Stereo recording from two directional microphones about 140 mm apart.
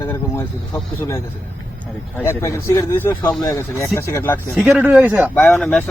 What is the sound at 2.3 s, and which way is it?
Speech, 20° left (ahead or behind).